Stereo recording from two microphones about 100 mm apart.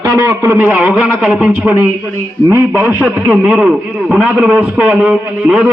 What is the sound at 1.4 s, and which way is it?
A man's voice, 20° right (ahead or behind).